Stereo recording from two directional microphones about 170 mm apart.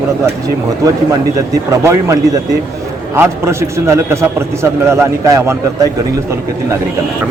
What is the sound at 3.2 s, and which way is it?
A man's voice, 15° right (ahead or behind).